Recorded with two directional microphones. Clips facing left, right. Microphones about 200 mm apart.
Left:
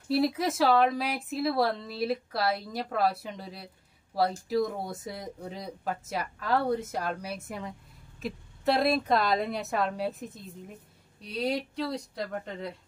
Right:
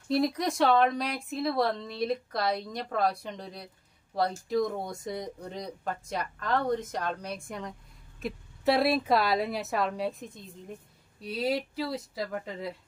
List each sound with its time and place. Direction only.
0.1 s a woman's voice: 5° left (ahead or behind)